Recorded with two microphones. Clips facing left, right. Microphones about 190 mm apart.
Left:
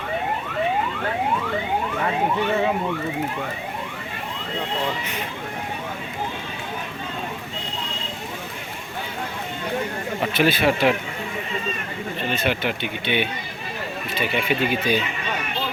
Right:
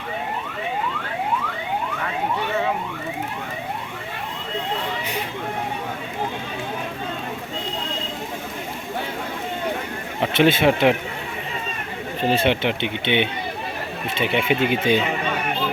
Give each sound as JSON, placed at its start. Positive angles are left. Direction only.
{"t": 10.3, "sound": "speech", "side_deg": -25}
{"t": 12.3, "sound": "speech", "side_deg": -25}